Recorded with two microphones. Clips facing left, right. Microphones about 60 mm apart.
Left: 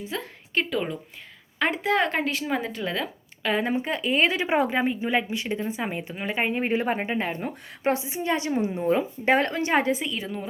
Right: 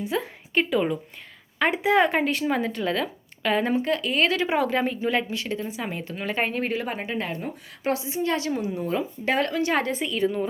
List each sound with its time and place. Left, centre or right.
0.0 s a woman's voice: centre
3.8 s a woman's voice: left
9.7 s speech: centre